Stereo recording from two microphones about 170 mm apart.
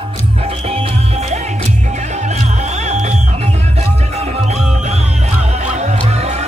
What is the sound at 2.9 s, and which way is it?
Music, 45° right (ahead or behind).